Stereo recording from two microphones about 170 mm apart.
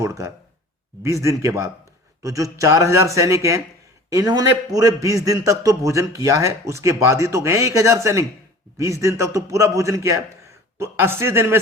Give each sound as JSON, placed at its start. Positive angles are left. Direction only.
{"t": 0.0, "sound": "a man's voice", "side_deg": -20}